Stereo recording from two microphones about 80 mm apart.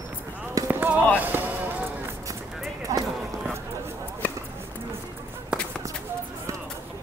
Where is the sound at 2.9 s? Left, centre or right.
Right.